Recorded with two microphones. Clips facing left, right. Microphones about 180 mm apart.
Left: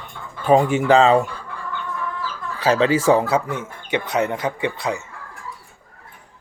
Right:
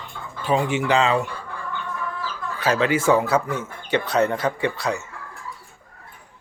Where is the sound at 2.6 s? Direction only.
30° left (ahead or behind).